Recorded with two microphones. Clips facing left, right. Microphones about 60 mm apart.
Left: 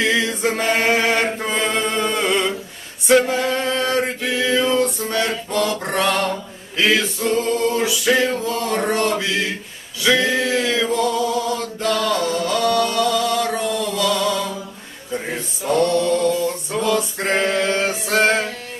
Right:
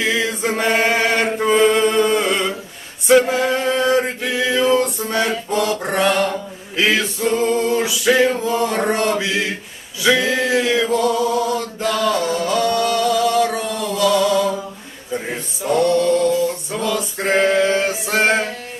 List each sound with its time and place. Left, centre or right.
0.0 s chant: centre
3.1 s a capella: centre
3.4 s mantra: centre
6.7 s male singing: centre
10.0 s mantra: centre
10.5 s male singing: centre
11.5 s music: centre
15.1 s a sound: centre